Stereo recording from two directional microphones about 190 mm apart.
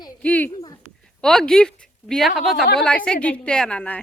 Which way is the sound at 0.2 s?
5° left (ahead or behind).